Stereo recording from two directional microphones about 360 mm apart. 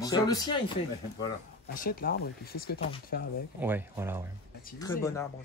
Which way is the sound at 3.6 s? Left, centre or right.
Centre.